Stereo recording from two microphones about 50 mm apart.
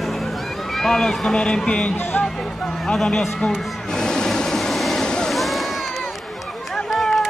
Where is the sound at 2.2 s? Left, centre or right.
Left.